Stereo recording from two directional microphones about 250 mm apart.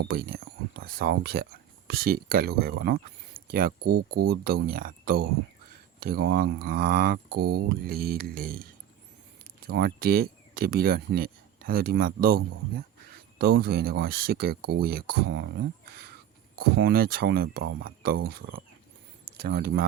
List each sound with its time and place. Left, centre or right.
0.0 s speech: right
9.6 s speech: right
16.6 s speech: right